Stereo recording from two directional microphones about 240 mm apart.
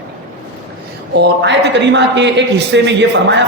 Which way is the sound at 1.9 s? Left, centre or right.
Right.